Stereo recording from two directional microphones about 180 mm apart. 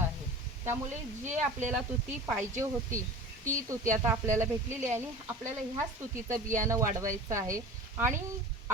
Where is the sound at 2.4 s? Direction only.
15° right (ahead or behind).